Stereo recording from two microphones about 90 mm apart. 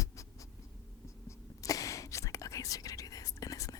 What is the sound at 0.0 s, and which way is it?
Writing, 35° left (ahead or behind).